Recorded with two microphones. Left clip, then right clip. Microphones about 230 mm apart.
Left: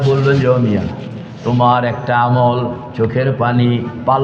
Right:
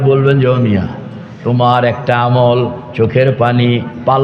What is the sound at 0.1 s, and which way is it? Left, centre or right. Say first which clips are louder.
A man's voice: right 2 dB; right.